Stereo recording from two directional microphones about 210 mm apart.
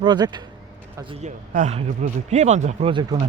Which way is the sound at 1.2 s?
35° right (ahead or behind).